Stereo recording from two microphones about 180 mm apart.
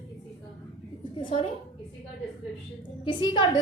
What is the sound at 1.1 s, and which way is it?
Speech, 30° left (ahead or behind).